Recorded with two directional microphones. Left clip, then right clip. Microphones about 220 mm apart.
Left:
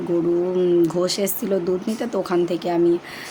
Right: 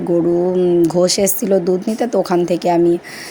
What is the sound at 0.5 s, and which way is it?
Speech, 20° right (ahead or behind).